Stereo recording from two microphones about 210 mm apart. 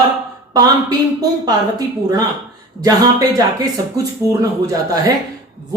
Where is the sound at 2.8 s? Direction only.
15° right (ahead or behind).